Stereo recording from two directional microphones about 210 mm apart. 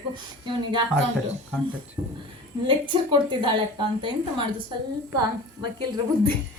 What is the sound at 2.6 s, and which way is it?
A woman's voice, 20° right (ahead or behind).